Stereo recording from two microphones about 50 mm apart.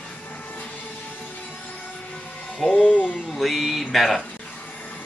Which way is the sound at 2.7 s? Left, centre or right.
Left.